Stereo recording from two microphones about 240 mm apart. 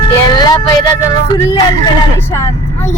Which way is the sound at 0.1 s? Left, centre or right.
Centre.